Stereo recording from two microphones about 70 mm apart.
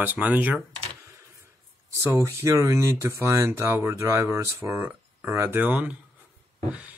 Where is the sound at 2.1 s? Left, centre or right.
Right.